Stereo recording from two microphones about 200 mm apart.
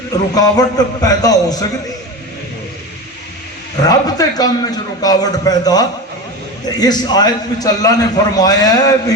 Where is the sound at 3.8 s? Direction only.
20° left (ahead or behind).